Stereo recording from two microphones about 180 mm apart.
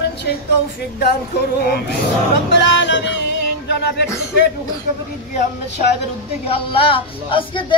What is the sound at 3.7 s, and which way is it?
Speech, 65° left (ahead or behind).